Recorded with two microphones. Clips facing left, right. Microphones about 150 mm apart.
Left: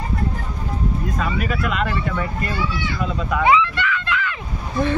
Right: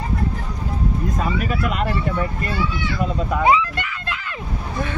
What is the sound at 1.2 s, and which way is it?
Speech, 40° right (ahead or behind).